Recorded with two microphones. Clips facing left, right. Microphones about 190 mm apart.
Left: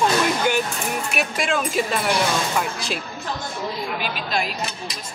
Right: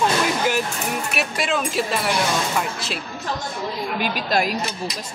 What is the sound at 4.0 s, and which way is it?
Speech, 50° right (ahead or behind).